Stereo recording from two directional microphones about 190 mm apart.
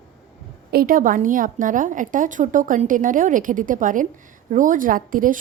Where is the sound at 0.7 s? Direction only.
50° right (ahead or behind).